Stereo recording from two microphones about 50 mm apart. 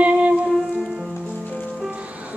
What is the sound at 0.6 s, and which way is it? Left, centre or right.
Music, centre.